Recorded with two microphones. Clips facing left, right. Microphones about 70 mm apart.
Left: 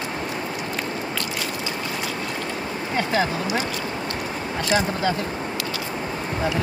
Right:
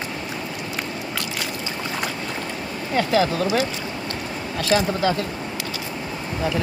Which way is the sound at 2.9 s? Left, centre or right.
Left.